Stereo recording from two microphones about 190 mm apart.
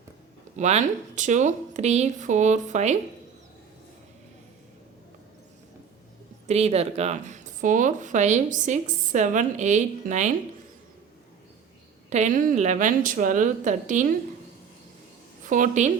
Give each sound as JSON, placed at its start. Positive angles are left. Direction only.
{"t": 0.5, "sound": "speech", "side_deg": -40}
{"t": 6.5, "sound": "speech", "side_deg": -35}
{"t": 12.1, "sound": "speech", "side_deg": -40}
{"t": 15.4, "sound": "speech", "side_deg": -40}